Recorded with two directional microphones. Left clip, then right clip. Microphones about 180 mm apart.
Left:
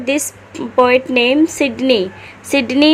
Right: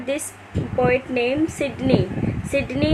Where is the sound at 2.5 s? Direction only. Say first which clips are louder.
Left 9 dB; 60° left (ahead or behind).